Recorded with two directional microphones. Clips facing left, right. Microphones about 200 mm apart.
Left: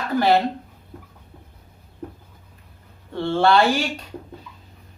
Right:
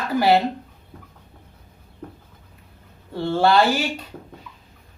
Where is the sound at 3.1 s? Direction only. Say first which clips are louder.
Even; 10° right (ahead or behind).